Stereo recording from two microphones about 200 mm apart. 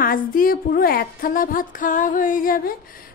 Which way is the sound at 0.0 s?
45° left (ahead or behind).